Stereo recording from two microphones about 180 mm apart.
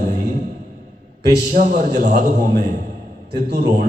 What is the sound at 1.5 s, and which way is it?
A man's voice, 45° right (ahead or behind).